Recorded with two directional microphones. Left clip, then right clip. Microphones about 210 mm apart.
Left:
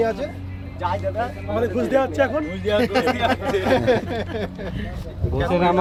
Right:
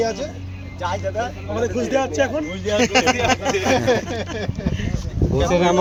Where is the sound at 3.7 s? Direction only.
20° left (ahead or behind).